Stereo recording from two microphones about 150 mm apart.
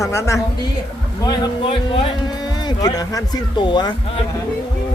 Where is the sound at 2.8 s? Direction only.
25° left (ahead or behind).